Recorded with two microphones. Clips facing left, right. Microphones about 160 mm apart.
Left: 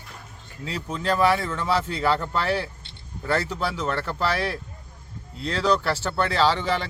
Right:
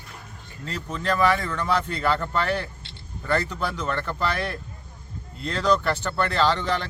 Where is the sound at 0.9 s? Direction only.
5° left (ahead or behind).